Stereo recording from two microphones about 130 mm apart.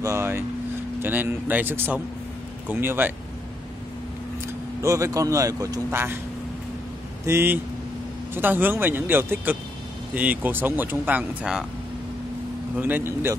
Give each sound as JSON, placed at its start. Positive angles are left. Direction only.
{"t": 0.0, "sound": "speech", "side_deg": -20}
{"t": 4.8, "sound": "speech", "side_deg": -25}
{"t": 7.2, "sound": "speech", "side_deg": -15}
{"t": 12.7, "sound": "speech", "side_deg": -15}